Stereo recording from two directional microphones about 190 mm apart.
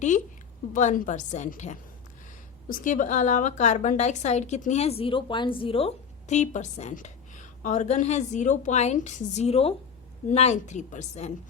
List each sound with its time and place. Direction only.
0.7 s a woman's voice: 40° left (ahead or behind)